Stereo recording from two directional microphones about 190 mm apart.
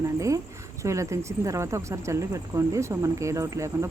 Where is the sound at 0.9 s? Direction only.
15° right (ahead or behind).